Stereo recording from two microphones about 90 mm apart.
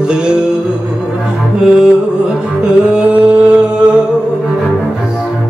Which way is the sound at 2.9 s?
15° right (ahead or behind).